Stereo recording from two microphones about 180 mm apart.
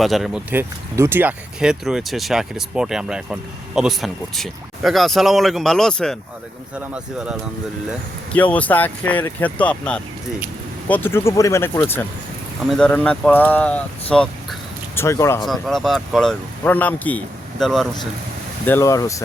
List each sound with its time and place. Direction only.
0.0 s speech: centre (ahead or behind)
0.9 s speech: 15° right (ahead or behind)
8.3 s speech: 10° left (ahead or behind)
15.4 s speech: centre (ahead or behind)
18.6 s speech: 15° left (ahead or behind)